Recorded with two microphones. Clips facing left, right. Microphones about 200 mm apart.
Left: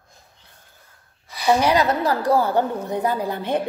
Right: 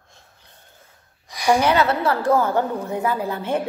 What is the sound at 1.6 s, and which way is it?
A woman's voice, 35° left (ahead or behind).